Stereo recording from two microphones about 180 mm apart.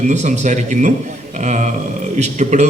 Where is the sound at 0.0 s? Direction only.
40° right (ahead or behind).